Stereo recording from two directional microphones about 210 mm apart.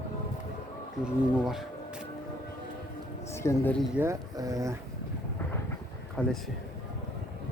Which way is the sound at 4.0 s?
15° right (ahead or behind).